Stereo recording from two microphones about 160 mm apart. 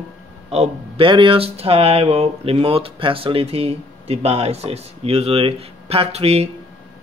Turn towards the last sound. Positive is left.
turn(degrees=-40)  # may be behind; listen again after turning